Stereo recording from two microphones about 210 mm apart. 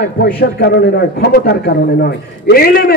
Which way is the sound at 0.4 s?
50° left (ahead or behind).